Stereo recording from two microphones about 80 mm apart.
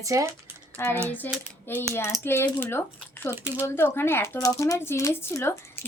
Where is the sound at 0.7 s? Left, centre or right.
Left.